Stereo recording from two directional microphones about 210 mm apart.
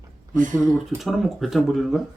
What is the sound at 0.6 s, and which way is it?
Speech, centre (ahead or behind).